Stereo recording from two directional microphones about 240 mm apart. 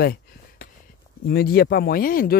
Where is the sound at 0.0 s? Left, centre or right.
Left.